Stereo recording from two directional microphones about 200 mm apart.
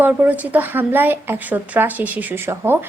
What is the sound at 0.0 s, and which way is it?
A woman's voice, 10° right (ahead or behind).